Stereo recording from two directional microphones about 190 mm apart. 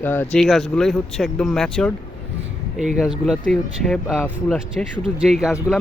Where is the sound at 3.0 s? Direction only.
5° right (ahead or behind).